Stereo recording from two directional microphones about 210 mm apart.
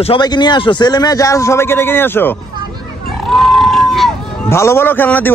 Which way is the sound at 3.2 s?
Centre (ahead or behind).